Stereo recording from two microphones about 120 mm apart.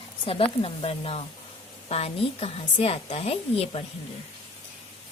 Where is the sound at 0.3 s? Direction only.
50° left (ahead or behind).